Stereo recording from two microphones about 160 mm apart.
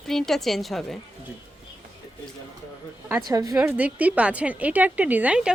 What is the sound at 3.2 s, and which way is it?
Speech, 20° right (ahead or behind).